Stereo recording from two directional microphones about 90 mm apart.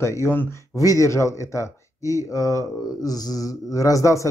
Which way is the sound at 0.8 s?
40° left (ahead or behind).